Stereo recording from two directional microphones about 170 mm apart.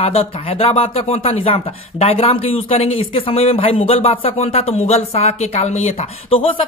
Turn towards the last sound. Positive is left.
turn(degrees=35)  # may be behind; listen again after turning